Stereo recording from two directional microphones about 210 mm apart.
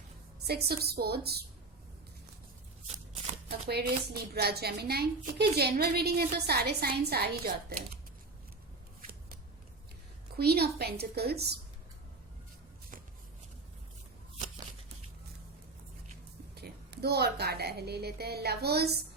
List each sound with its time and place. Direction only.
0.4 s a woman's voice: 50° right (ahead or behind)
3.7 s a woman's voice: 50° right (ahead or behind)
10.3 s a woman's voice: 50° right (ahead or behind)
16.6 s a woman's voice: 50° right (ahead or behind)